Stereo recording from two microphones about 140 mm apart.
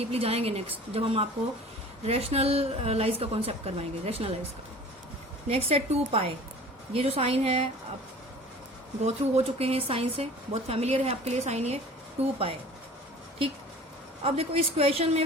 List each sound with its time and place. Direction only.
0.0 s a woman's voice: 45° right (ahead or behind)
5.5 s a woman's voice: 45° right (ahead or behind)
9.0 s a woman's voice: 45° right (ahead or behind)
14.3 s a woman's voice: 45° right (ahead or behind)